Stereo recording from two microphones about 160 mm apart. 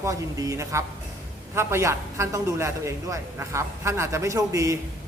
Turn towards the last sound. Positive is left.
turn(degrees=-20)  # may be behind; listen again after turning